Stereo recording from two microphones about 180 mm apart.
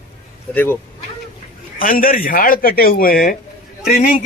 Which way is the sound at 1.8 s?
50° left (ahead or behind).